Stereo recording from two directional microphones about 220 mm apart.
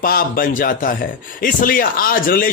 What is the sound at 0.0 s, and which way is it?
Speech, 40° left (ahead or behind).